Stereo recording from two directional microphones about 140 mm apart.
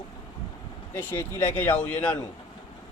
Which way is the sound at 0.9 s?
15° left (ahead or behind).